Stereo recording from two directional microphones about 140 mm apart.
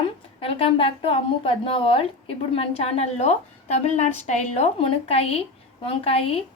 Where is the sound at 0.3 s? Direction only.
40° left (ahead or behind).